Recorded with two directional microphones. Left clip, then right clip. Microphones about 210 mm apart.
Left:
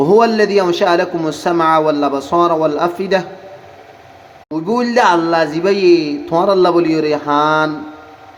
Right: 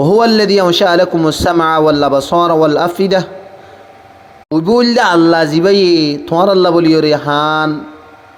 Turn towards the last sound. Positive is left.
turn(degrees=-30)  # may be behind; listen again after turning